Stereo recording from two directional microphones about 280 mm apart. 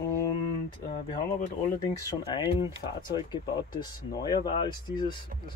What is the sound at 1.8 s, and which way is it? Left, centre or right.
Speech, centre.